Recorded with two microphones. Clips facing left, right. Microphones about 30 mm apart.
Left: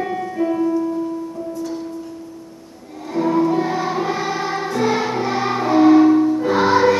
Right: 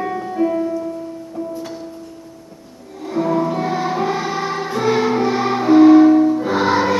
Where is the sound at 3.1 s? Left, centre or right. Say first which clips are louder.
Left 1 dB; centre.